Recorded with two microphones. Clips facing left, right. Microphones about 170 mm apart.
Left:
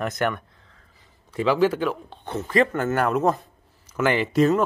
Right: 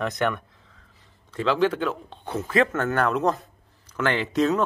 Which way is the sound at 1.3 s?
10° left (ahead or behind).